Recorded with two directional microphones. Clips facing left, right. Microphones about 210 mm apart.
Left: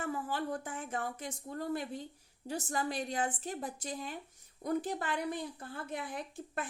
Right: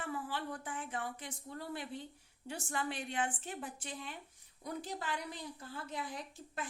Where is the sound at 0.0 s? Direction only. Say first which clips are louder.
Left 4 dB; 45° left (ahead or behind).